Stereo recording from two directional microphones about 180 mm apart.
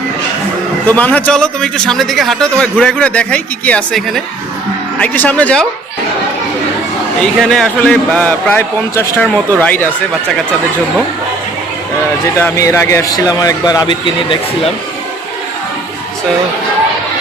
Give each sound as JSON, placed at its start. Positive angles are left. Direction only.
{"t": 0.9, "sound": "a man's voice", "side_deg": 10}
{"t": 7.2, "sound": "a man's voice", "side_deg": 0}
{"t": 12.4, "sound": "a man's voice", "side_deg": 15}